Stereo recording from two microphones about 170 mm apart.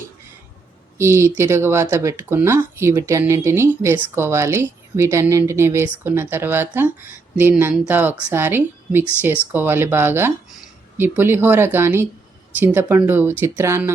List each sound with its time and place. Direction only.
0.9 s speech: 15° right (ahead or behind)